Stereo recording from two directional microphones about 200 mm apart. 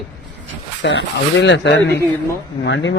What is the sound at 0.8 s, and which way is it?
A man's voice, 65° left (ahead or behind).